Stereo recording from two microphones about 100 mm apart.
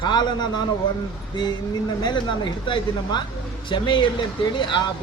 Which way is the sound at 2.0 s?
50° left (ahead or behind).